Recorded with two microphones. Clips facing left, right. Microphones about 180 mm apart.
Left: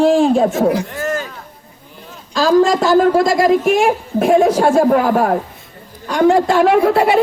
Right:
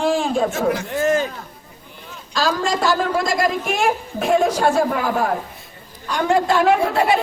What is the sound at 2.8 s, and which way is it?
A woman's voice, 45° left (ahead or behind).